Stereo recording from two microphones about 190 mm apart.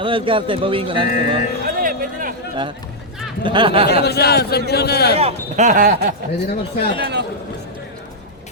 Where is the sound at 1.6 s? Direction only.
45° right (ahead or behind).